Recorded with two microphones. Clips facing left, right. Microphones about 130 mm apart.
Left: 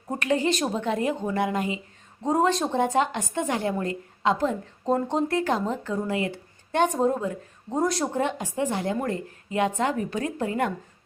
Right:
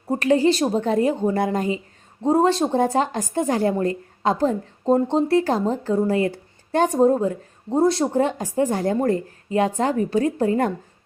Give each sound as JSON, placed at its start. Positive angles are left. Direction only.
{"t": 0.2, "sound": "a woman's voice", "side_deg": -35}